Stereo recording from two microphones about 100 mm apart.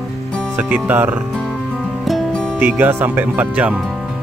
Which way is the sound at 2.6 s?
20° right (ahead or behind).